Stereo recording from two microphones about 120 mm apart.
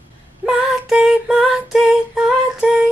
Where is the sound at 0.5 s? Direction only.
5° right (ahead or behind).